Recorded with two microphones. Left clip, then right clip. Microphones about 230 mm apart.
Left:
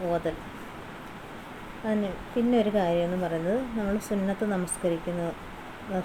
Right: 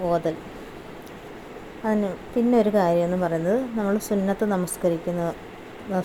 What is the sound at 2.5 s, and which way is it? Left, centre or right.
Speech, right.